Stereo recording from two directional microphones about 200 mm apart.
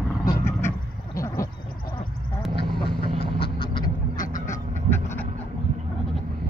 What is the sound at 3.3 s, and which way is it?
Vehicle, 25° left (ahead or behind).